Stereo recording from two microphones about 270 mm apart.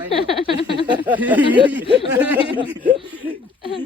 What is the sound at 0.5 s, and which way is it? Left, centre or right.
Speech, centre.